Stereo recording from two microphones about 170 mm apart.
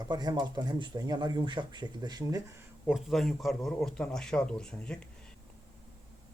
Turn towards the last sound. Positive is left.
turn(degrees=5)  # may be behind; listen again after turning